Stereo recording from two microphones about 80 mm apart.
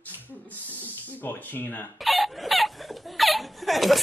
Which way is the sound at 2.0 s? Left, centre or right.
Centre.